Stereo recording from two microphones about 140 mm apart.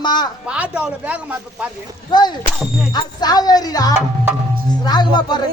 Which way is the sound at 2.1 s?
30° left (ahead or behind).